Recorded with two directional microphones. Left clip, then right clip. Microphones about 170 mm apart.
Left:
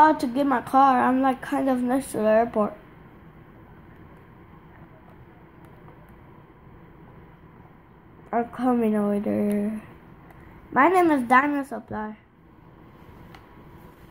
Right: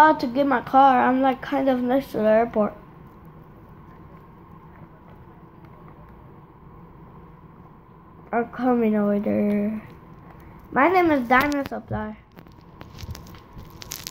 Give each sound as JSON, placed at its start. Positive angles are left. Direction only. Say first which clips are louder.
{"t": 0.0, "sound": "a woman's voice", "louder": "right 2 dB", "side_deg": 45}
{"t": 8.5, "sound": "a woman's voice", "louder": "right 3 dB", "side_deg": 45}
{"t": 10.7, "sound": "a woman's voice", "louder": "even", "side_deg": 35}
{"t": 11.1, "sound": "a woman's voice", "louder": "even", "side_deg": 45}